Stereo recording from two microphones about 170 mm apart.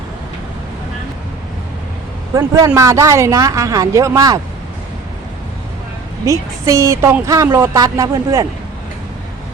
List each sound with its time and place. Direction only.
2.3 s speech: 20° right (ahead or behind)
6.3 s a woman's voice: 20° right (ahead or behind)